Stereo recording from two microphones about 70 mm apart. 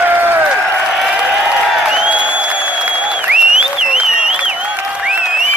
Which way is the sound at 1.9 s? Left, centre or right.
Centre.